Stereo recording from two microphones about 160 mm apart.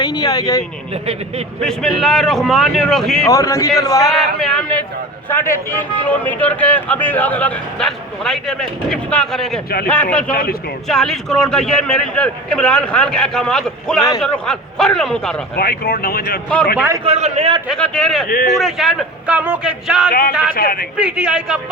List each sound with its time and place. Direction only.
0.0 s speech: 25° left (ahead or behind)
1.6 s a man's voice: 5° left (ahead or behind)
3.2 s speech: 20° left (ahead or behind)
4.4 s a man's voice: centre (ahead or behind)
15.5 s speech: 70° left (ahead or behind)
17.0 s a man's voice: 40° right (ahead or behind)
17.7 s a man's voice: 5° left (ahead or behind)
20.1 s speech: 65° left (ahead or behind)
21.0 s a man's voice: 5° right (ahead or behind)